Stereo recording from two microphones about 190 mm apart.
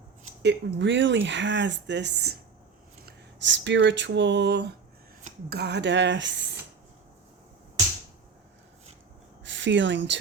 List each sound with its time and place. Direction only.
0.4 s speech: 65° right (ahead or behind)
3.1 s speech: 70° right (ahead or behind)
9.4 s speech: 70° right (ahead or behind)